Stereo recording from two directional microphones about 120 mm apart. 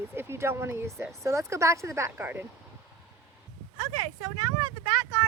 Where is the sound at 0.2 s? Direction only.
20° right (ahead or behind).